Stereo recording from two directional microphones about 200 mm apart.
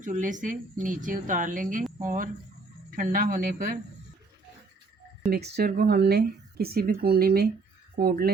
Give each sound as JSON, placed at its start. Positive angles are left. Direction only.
{"t": 0.0, "sound": "a woman's voice", "side_deg": -40}
{"t": 5.2, "sound": "speech", "side_deg": -40}